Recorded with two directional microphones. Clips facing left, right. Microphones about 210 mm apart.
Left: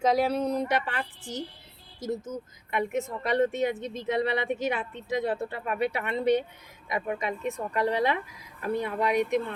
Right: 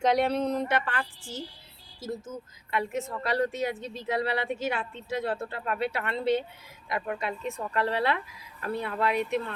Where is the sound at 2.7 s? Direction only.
20° left (ahead or behind).